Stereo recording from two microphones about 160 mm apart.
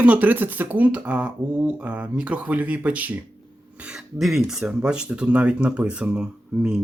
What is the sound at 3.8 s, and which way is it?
Speech, 5° right (ahead or behind).